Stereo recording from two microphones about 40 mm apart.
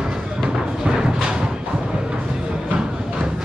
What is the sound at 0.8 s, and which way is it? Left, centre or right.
Music, centre.